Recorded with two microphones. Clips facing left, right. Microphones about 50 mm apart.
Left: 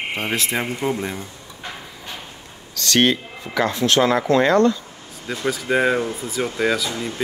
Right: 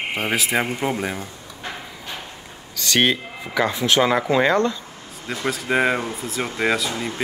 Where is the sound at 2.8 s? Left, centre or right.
Centre.